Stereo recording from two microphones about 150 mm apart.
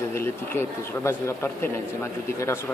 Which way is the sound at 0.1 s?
15° left (ahead or behind).